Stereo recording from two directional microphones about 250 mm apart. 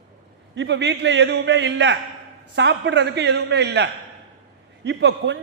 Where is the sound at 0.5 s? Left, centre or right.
Right.